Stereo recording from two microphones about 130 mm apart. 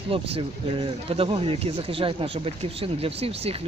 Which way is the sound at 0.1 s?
45° right (ahead or behind).